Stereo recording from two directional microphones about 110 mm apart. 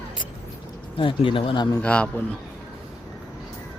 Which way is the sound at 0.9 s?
50° left (ahead or behind).